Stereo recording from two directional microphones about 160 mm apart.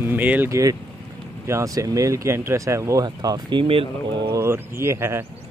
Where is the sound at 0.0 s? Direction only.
10° right (ahead or behind); by 3.8 s 30° right (ahead or behind).